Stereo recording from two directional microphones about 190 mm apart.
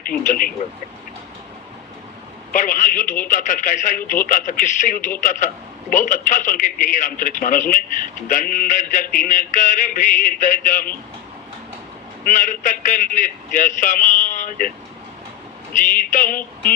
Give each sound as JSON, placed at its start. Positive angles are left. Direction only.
{"t": 0.0, "sound": "speech", "side_deg": 50}
{"t": 2.5, "sound": "speech", "side_deg": 45}
{"t": 12.2, "sound": "speech", "side_deg": 45}
{"t": 15.8, "sound": "speech", "side_deg": 45}